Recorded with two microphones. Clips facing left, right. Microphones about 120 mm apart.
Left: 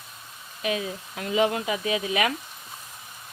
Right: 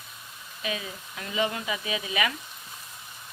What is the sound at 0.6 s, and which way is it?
Speech, 55° left (ahead or behind).